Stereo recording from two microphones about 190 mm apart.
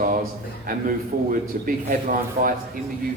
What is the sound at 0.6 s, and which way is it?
A man's voice, 45° right (ahead or behind).